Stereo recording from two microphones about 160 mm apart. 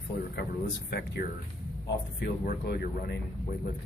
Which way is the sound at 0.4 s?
90° left.